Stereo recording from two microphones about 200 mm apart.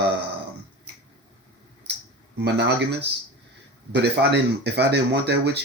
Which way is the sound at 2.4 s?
60° right (ahead or behind).